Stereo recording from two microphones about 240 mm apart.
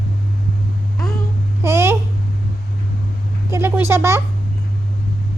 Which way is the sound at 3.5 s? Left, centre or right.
Centre.